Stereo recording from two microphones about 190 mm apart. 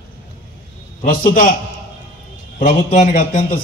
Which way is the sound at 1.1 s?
45° left (ahead or behind).